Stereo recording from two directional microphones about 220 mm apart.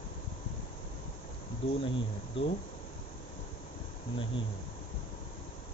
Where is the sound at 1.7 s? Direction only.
25° left (ahead or behind).